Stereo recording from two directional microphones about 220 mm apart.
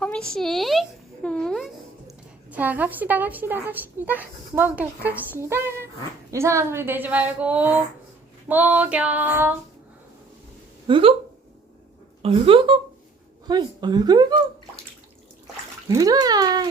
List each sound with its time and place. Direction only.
0.0 s speech: 5° left (ahead or behind)
10.8 s speech: 20° right (ahead or behind)
12.2 s a woman's voice: 25° right (ahead or behind)
15.9 s speech: 15° right (ahead or behind)